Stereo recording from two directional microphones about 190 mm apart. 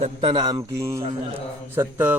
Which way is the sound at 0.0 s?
30° right (ahead or behind).